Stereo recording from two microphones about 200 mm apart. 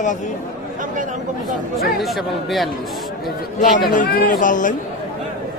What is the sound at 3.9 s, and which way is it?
Speech, 45° left (ahead or behind).